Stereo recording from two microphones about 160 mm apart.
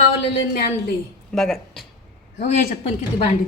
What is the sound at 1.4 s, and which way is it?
Speech, 5° left (ahead or behind).